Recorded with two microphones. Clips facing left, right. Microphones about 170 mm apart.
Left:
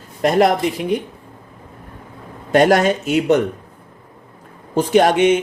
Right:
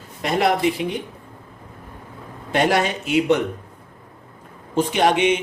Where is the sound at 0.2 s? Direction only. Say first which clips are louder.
Left 6 dB; 45° left (ahead or behind).